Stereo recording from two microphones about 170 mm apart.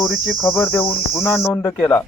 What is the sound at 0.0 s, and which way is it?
Cricket, centre (ahead or behind).